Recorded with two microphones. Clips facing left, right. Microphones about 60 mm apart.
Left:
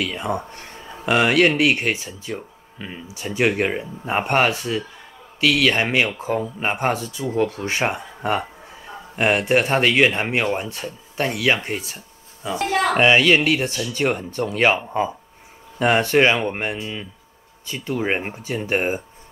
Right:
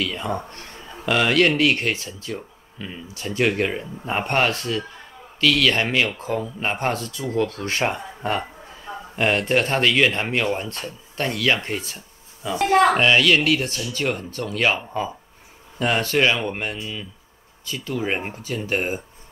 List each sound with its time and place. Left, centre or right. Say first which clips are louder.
0.0 s speech: left 1 dB; centre
12.5 s speech: right 4 dB; right
12.9 s speech: left 2 dB; centre